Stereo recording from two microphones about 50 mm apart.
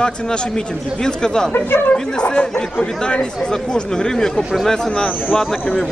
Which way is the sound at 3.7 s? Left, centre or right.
Centre.